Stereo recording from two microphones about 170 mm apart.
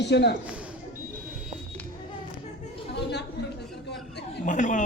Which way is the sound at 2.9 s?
80° left.